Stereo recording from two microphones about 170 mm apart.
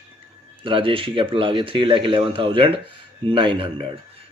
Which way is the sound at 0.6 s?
30° right (ahead or behind).